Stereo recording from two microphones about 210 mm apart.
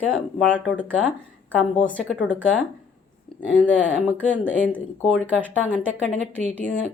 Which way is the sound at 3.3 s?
Centre (ahead or behind).